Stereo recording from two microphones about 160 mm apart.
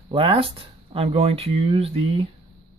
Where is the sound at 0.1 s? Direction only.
35° right (ahead or behind).